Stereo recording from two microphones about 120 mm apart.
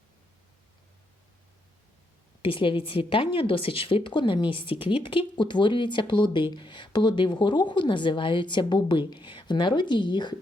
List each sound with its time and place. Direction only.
2.4 s speech: 45° left (ahead or behind)